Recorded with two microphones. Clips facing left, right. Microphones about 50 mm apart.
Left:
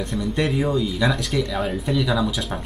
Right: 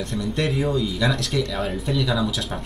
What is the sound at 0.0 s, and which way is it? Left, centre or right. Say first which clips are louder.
Speech: left 1 dB; centre.